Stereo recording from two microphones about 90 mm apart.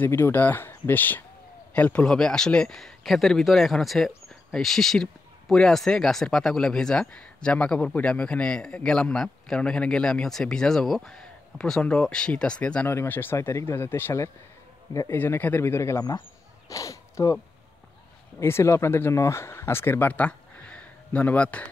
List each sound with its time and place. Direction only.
0.0 s speech: 25° left (ahead or behind)
12.9 s speech: 25° left (ahead or behind)
18.4 s speech: 30° left (ahead or behind); by 21.6 s 15° left (ahead or behind)